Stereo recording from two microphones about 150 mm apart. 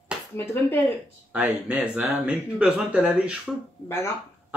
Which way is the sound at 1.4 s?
5° right (ahead or behind).